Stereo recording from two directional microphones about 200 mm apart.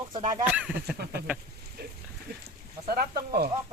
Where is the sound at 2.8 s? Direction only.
50° right (ahead or behind).